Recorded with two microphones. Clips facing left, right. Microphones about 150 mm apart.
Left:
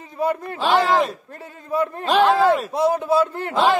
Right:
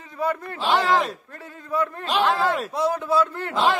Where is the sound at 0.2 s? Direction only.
20° left (ahead or behind).